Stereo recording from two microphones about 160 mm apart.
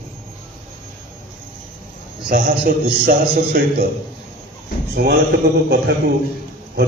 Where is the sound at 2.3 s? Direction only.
65° right (ahead or behind).